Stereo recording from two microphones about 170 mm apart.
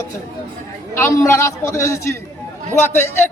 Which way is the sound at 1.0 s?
15° left (ahead or behind).